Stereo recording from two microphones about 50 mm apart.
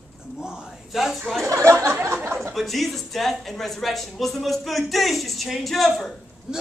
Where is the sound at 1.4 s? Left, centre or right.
Right.